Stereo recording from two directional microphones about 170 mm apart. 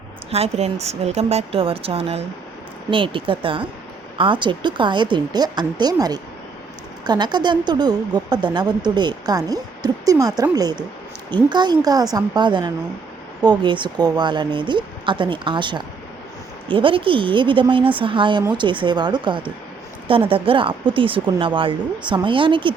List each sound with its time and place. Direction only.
0.3 s a woman's voice: 35° right (ahead or behind)